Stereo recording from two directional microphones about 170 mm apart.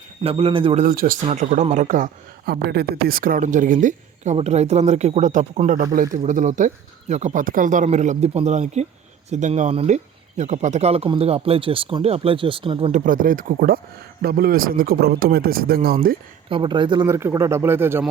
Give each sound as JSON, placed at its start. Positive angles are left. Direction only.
{"t": 0.2, "sound": "speech", "side_deg": -35}
{"t": 0.9, "sound": "a man's voice", "side_deg": -55}
{"t": 1.3, "sound": "a woman's voice", "side_deg": -45}
{"t": 2.5, "sound": "a woman's voice", "side_deg": -70}
{"t": 12.9, "sound": "a woman's voice", "side_deg": -50}
{"t": 16.5, "sound": "speech", "side_deg": -30}
{"t": 17.1, "sound": "speech", "side_deg": -15}